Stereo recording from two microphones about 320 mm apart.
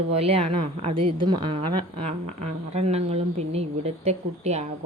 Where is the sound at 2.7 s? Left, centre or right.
Centre.